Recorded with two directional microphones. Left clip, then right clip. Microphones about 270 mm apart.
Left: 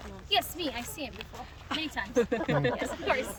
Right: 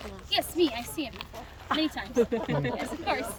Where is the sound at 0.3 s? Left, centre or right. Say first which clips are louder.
Right 3 dB; centre.